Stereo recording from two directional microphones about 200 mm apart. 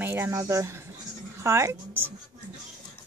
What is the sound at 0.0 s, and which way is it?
A woman's voice, 10° right (ahead or behind).